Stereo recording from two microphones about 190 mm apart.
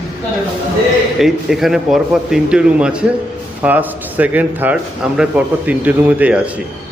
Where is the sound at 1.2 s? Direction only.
Centre (ahead or behind).